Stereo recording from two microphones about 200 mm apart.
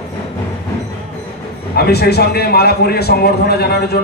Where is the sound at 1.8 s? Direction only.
55° left (ahead or behind).